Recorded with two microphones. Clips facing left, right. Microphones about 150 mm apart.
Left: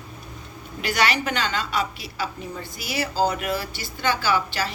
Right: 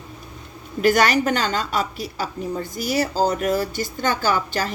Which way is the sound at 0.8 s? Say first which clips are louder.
Right 6 dB; 45° right (ahead or behind).